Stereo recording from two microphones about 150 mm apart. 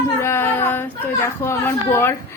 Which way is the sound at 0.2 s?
15° left (ahead or behind).